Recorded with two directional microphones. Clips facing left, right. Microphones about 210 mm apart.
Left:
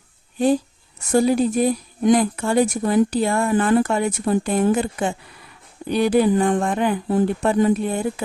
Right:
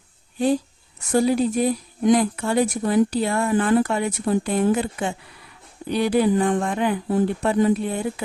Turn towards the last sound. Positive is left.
turn(degrees=50)  # may be behind; listen again after turning